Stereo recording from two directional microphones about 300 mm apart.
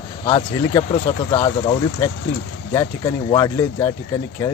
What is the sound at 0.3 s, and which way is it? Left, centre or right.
Speech, centre.